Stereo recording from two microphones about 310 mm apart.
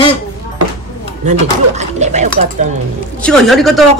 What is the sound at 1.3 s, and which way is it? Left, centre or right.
Speech, right.